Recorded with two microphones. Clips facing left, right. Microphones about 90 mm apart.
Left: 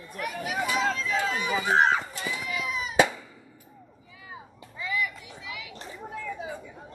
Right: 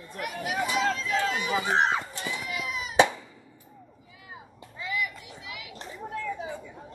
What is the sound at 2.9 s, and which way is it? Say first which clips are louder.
Cat: right 1 dB; 25° right (ahead or behind).